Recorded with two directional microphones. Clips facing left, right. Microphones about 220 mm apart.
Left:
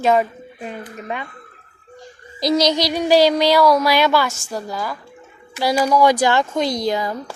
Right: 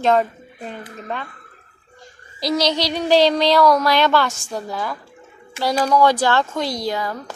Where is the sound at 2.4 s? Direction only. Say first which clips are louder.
Left 3 dB; 15° left (ahead or behind).